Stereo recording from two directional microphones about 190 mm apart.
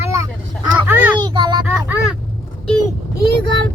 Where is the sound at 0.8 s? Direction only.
10° right (ahead or behind).